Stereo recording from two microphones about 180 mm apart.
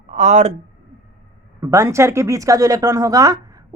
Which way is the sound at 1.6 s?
15° right (ahead or behind).